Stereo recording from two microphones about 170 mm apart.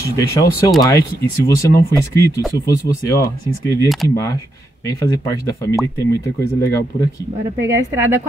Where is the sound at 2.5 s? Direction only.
20° left (ahead or behind).